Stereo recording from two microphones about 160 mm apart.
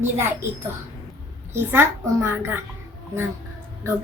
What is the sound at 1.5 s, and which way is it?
A woman's voice, 15° right (ahead or behind).